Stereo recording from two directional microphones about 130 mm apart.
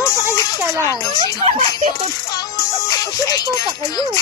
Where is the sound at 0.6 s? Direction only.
20° right (ahead or behind).